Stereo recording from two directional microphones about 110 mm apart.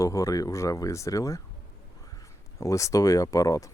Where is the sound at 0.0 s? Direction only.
30° left (ahead or behind).